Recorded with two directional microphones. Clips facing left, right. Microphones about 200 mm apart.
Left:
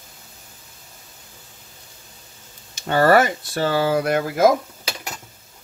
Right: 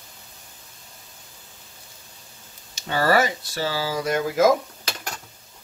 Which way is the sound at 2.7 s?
55° left (ahead or behind).